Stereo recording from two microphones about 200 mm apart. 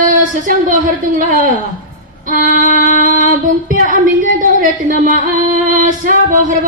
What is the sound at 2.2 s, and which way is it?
Music, 40° right (ahead or behind).